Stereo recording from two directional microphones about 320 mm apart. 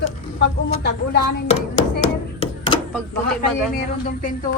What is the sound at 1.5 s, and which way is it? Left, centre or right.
Speech, left.